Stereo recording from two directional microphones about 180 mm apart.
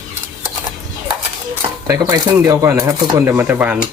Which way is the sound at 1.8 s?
15° right (ahead or behind).